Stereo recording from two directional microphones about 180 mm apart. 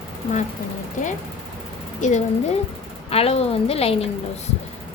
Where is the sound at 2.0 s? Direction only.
40° left (ahead or behind).